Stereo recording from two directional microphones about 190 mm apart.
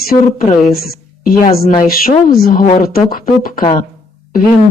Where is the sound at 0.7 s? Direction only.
50° left (ahead or behind).